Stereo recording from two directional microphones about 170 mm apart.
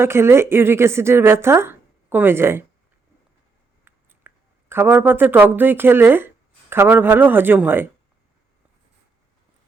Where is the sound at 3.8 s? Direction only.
15° right (ahead or behind).